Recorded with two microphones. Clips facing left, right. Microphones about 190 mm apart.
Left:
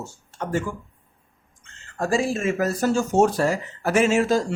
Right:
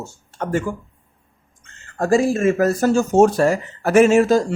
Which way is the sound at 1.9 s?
45° right (ahead or behind).